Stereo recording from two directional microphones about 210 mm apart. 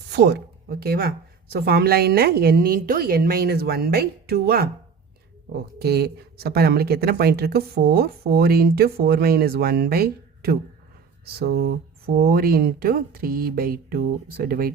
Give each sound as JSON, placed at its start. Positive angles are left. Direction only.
{"t": 0.1, "sound": "speech", "side_deg": -50}
{"t": 5.8, "sound": "speech", "side_deg": -50}
{"t": 12.0, "sound": "speech", "side_deg": -45}